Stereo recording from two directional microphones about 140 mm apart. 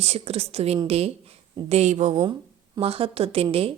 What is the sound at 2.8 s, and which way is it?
Speech, 45° right (ahead or behind).